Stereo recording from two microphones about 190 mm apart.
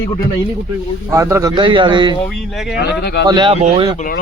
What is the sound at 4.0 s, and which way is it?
Speech, 45° left (ahead or behind).